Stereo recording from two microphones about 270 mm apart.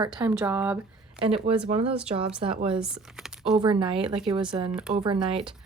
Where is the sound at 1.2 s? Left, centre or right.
Right.